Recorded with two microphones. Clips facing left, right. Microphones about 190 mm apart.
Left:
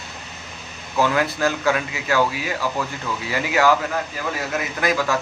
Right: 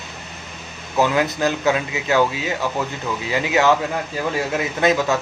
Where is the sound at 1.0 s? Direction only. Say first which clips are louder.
Right 1 dB; 20° right (ahead or behind).